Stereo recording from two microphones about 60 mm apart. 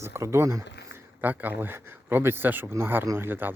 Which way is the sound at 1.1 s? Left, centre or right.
Right.